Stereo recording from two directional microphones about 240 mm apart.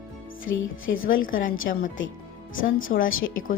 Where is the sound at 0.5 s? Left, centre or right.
Left.